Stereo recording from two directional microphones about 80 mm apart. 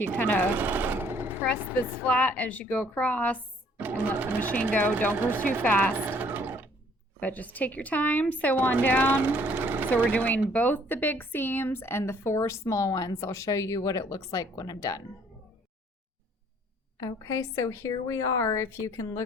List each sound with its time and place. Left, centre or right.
0.2 s a woman's voice: left
0.5 s vehicle: right
2.0 s a woman's voice: centre
3.8 s speech: right
4.4 s a woman's voice: left
6.0 s sewing machine: right
7.2 s a woman's voice: centre
9.2 s speech: right
10.1 s a woman's voice: centre; by 15.0 s left
17.0 s a woman's voice: left